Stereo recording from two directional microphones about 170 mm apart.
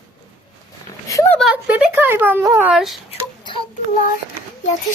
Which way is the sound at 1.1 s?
15° left (ahead or behind).